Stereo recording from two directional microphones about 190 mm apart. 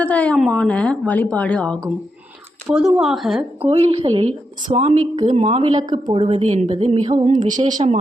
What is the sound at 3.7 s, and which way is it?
A woman's voice, 35° right (ahead or behind).